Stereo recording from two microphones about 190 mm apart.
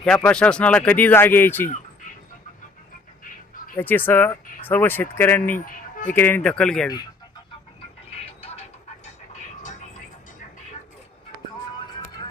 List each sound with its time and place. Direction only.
0.0 s speech: 5° left (ahead or behind)
3.8 s speech: 10° left (ahead or behind)
5.5 s music: 45° left (ahead or behind)
6.1 s speech: 10° left (ahead or behind)
8.2 s a sound: 30° left (ahead or behind)